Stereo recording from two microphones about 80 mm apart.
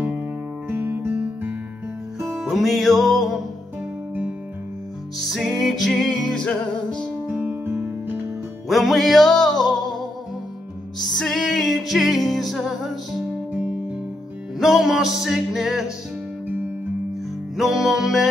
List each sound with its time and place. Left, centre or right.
0.7 s music: right
2.2 s music: centre
5.2 s music: centre
7.3 s music: centre
8.6 s music: centre
13.5 s music: centre
17.6 s music: centre